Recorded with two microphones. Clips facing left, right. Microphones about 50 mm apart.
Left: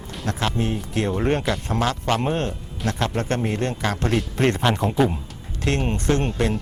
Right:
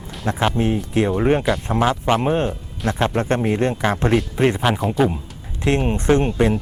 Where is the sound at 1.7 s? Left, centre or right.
Centre.